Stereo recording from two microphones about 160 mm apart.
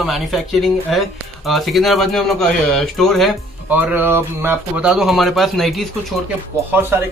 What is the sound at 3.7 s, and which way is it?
Speech, 10° right (ahead or behind).